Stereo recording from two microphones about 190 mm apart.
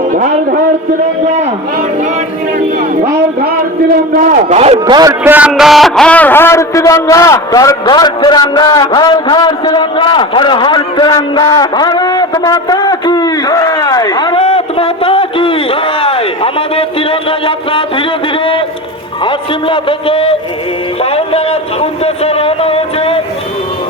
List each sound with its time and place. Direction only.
0.1 s a man's voice: 45° right (ahead or behind)
3.9 s a man's voice: 45° right (ahead or behind)
4.9 s a man's voice: 15° right (ahead or behind); by 18.0 s 30° left (ahead or behind)
19.2 s a sound: 25° left (ahead or behind)